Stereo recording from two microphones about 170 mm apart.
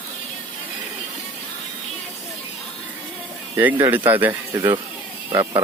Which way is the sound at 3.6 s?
10° right (ahead or behind).